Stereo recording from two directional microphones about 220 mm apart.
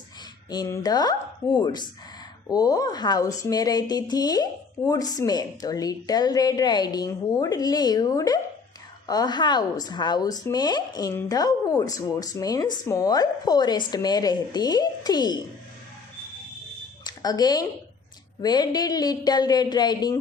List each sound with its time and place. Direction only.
0.5 s speech: 15° left (ahead or behind)
17.0 s a sound: 15° left (ahead or behind)
18.4 s speech: 20° left (ahead or behind)